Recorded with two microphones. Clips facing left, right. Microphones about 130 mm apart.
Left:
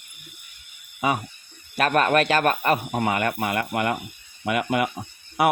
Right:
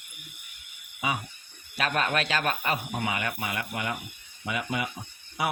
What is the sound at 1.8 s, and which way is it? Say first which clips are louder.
Speech: left 8 dB; 50° left (ahead or behind).